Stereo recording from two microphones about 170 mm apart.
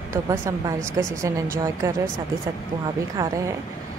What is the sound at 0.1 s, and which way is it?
A woman's voice, 20° right (ahead or behind).